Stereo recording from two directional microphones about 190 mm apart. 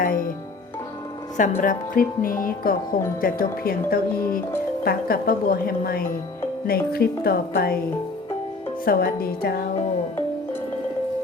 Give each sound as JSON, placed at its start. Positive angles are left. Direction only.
{"t": 0.0, "sound": "music", "side_deg": 45}
{"t": 1.4, "sound": "a woman's voice", "side_deg": 45}
{"t": 8.8, "sound": "a woman's voice", "side_deg": 50}